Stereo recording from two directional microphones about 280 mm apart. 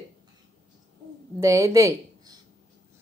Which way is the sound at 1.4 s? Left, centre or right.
Centre.